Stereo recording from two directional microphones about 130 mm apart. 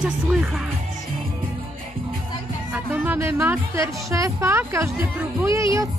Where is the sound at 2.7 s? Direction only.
15° right (ahead or behind).